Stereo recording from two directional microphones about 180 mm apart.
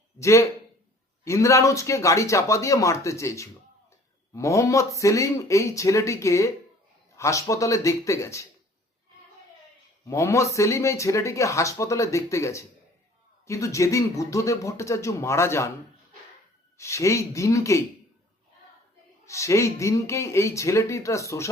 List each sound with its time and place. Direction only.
0.2 s speech: 15° left (ahead or behind)
10.1 s speech: 15° left (ahead or behind)
16.7 s speech: 15° left (ahead or behind)
19.2 s speech: 15° left (ahead or behind)